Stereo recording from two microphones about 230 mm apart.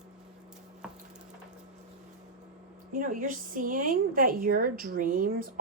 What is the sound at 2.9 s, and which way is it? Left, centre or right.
A woman's voice, right.